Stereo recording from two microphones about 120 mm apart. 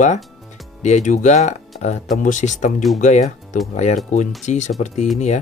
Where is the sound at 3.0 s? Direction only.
70° left (ahead or behind).